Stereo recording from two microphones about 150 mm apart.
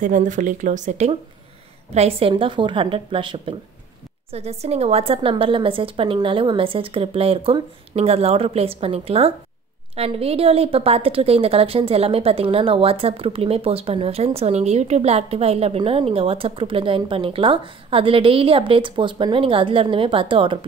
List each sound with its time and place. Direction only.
0.0 s speech: 55° right (ahead or behind)
2.0 s a woman's voice: 40° right (ahead or behind)